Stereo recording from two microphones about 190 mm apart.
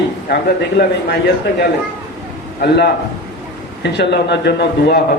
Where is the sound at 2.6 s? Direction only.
55° left (ahead or behind).